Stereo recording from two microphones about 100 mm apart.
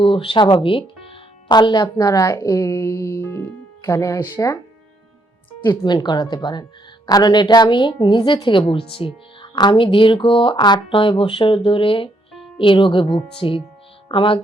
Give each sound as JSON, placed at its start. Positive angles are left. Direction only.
{"t": 0.0, "sound": "speech", "side_deg": 60}
{"t": 5.8, "sound": "a woman's voice", "side_deg": 45}